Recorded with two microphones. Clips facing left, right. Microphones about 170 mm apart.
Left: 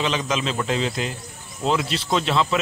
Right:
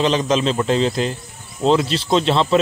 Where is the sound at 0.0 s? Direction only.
35° right (ahead or behind).